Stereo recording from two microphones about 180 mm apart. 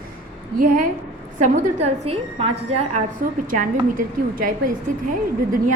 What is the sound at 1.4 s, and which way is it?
A woman's voice, 45° right (ahead or behind).